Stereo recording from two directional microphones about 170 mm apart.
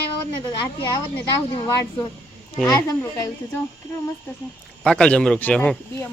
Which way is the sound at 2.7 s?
20° left (ahead or behind).